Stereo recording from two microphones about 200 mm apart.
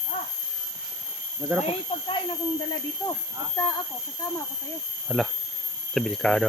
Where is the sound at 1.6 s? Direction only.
25° left (ahead or behind).